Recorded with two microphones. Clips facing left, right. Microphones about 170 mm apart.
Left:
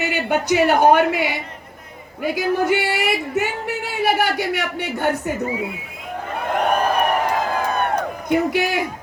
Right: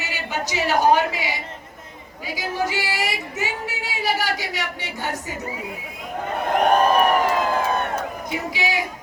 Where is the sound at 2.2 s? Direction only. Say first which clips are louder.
Left 6 dB; 60° left (ahead or behind).